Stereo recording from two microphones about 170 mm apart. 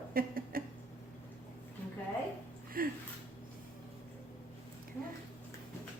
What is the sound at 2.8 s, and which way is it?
Speech, 60° right (ahead or behind).